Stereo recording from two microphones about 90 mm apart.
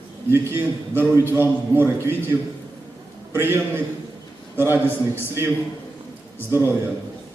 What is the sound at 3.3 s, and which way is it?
A man's voice, 25° right (ahead or behind).